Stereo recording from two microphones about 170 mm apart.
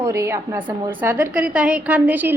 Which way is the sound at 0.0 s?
15° right (ahead or behind).